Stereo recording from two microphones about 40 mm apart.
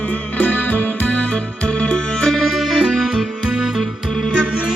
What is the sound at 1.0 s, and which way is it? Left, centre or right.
Music, left.